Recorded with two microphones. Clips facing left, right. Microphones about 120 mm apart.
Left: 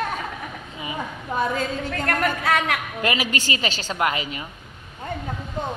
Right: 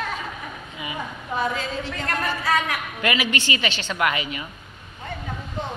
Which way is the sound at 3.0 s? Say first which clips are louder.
Right 1 dB; 40° left (ahead or behind).